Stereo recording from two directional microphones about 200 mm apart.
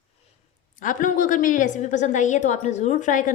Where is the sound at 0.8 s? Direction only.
40° left (ahead or behind).